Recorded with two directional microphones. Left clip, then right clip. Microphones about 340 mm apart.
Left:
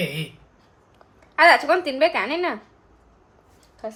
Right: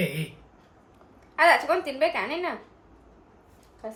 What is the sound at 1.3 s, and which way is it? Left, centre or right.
A woman's voice, left.